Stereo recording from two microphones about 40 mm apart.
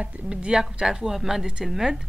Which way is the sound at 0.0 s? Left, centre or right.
Right.